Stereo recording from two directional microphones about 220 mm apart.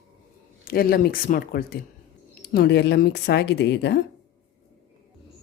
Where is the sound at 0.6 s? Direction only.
40° left (ahead or behind).